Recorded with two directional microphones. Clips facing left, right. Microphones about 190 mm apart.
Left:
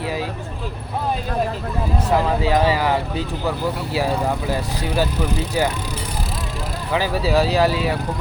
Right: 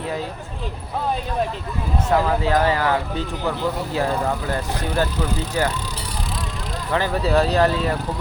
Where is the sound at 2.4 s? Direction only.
10° left (ahead or behind).